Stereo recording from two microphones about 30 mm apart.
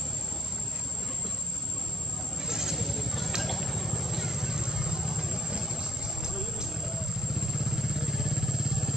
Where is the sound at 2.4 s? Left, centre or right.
Centre.